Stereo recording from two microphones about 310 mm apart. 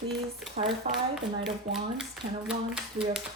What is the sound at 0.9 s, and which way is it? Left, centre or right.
Speech, right.